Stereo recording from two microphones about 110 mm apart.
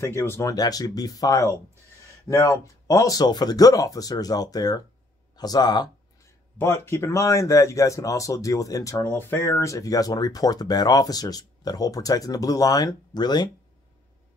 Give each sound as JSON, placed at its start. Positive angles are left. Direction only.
{"t": 0.0, "sound": "speech", "side_deg": 20}
{"t": 6.6, "sound": "speech", "side_deg": 20}